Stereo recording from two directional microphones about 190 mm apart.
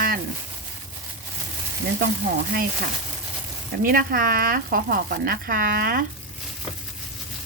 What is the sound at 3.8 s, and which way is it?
Speech, 50° right (ahead or behind).